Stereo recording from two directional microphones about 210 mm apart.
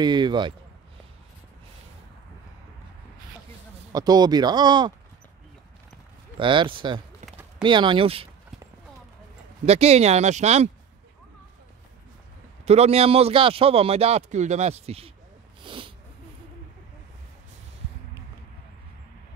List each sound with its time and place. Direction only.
0.0 s speech: 20° right (ahead or behind)
3.9 s speech: 20° right (ahead or behind)
6.3 s speech: 25° right (ahead or behind)
9.7 s speech: 30° right (ahead or behind)
12.6 s speech: 30° right (ahead or behind)
15.6 s sneeze: 25° right (ahead or behind)